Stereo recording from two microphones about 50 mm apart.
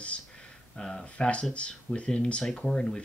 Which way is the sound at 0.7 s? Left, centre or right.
Centre.